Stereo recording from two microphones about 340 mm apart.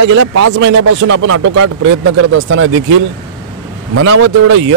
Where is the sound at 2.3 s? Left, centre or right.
Right.